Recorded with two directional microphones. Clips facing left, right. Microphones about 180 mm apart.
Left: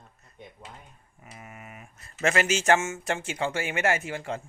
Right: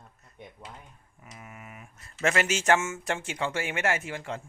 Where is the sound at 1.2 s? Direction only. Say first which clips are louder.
Left 1 dB; 60° left (ahead or behind).